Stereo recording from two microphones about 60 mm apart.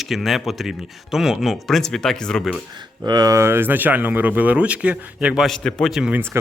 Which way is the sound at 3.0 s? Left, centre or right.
Right.